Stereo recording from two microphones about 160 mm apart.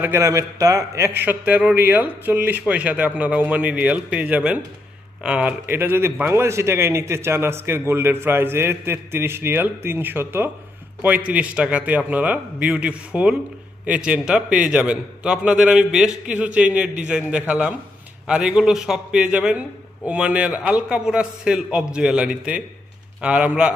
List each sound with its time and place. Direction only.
0.0 s a man's voice: 15° right (ahead or behind)